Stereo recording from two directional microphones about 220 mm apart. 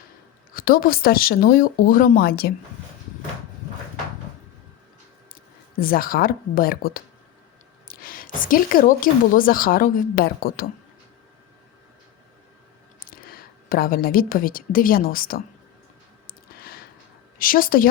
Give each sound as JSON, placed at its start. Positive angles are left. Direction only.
{"t": 0.5, "sound": "a woman's voice", "side_deg": 40}
{"t": 5.8, "sound": "a woman's voice", "side_deg": 40}
{"t": 13.1, "sound": "a woman's voice", "side_deg": 40}
{"t": 16.2, "sound": "a sound", "side_deg": 45}
{"t": 17.3, "sound": "a woman's voice", "side_deg": 40}